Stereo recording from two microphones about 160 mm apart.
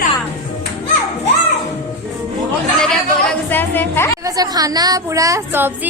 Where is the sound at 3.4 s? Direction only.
10° left (ahead or behind).